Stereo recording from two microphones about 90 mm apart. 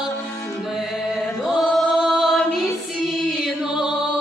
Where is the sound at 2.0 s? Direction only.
5° right (ahead or behind).